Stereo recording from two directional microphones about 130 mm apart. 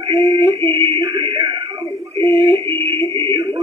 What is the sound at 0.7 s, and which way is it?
Music, 40° right (ahead or behind).